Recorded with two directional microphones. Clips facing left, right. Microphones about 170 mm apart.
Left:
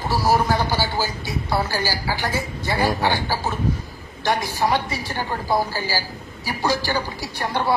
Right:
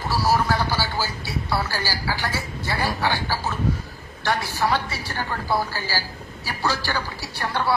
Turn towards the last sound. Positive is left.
turn(degrees=15)  # may be behind; listen again after turning